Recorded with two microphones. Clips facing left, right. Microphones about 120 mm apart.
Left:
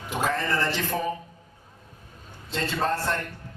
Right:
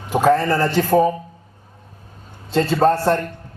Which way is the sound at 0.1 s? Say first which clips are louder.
Right 11 dB; 35° right (ahead or behind).